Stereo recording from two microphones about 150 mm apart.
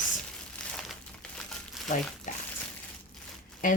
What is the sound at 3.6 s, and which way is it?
Speech, 60° left (ahead or behind).